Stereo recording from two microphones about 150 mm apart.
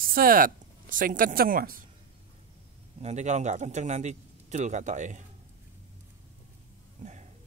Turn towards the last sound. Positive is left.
turn(degrees=-50)  # may be behind; listen again after turning